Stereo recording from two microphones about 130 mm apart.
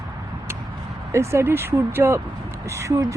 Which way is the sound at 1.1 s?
20° right (ahead or behind).